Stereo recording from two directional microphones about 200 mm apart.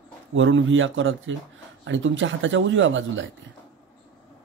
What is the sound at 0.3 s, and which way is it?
Speech, 75° right (ahead or behind).